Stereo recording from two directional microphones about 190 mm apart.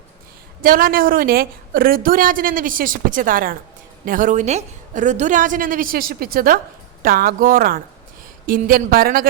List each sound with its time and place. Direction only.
0.6 s a woman's voice: 50° right (ahead or behind)